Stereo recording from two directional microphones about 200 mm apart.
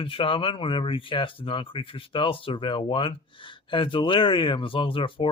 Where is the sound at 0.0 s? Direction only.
25° left (ahead or behind).